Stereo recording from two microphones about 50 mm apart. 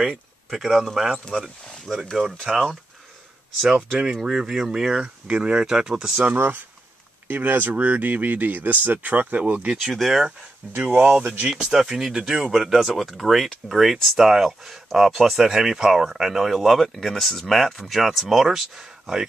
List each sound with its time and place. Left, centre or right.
0.5 s speech: centre
1.3 s speech: centre
2.5 s speech: centre
3.6 s speech: centre
6.3 s speech: right
9.9 s speech: centre
10.6 s speech: right